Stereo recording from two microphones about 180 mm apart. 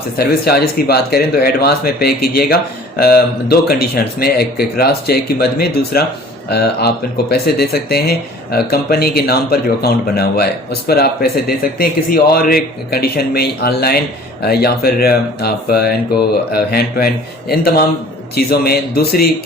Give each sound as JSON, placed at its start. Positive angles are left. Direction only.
{"t": 0.2, "sound": "speech", "side_deg": 60}